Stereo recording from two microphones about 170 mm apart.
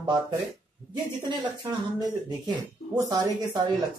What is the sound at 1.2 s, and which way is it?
Speech, 25° right (ahead or behind).